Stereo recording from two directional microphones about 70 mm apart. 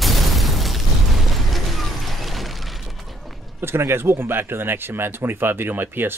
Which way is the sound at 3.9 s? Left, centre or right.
Right.